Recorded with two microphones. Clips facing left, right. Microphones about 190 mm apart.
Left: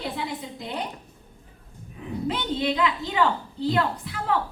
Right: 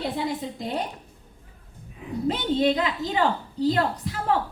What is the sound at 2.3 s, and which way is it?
A woman's voice, 45° right (ahead or behind).